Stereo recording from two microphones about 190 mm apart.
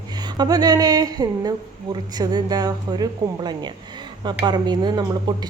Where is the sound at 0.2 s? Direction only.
20° right (ahead or behind).